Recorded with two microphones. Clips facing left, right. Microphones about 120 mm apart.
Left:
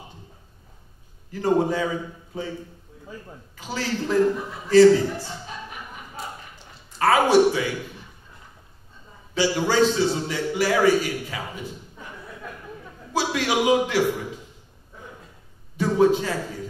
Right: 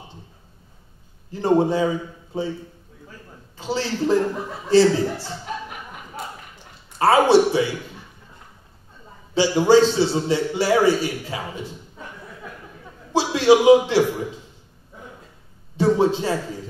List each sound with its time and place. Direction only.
1.3 s a man's voice: 25° right (ahead or behind)
3.5 s a man's voice: 30° right (ahead or behind)
7.0 s a man's voice: 30° right (ahead or behind)
9.3 s a man's voice: 30° right (ahead or behind)
13.1 s a man's voice: 30° right (ahead or behind)
15.7 s a man's voice: 30° right (ahead or behind)